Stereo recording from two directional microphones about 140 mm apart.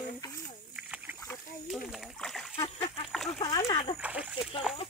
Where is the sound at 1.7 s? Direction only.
Centre (ahead or behind).